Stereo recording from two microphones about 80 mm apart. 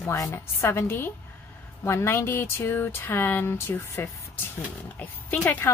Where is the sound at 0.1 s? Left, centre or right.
Left.